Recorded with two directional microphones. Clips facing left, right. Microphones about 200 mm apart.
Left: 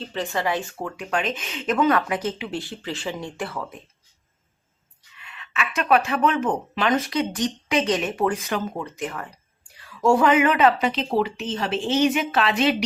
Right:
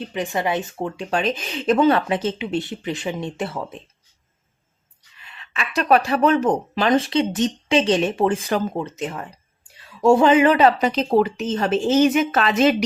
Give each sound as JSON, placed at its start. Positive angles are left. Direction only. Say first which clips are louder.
{"t": 0.0, "sound": "speech", "louder": "right 2 dB", "side_deg": -15}
{"t": 5.1, "sound": "speech", "louder": "left 2 dB", "side_deg": -35}